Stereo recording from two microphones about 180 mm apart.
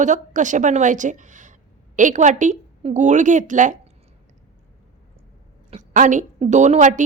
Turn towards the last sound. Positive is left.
turn(degrees=-45)  # may be behind; listen again after turning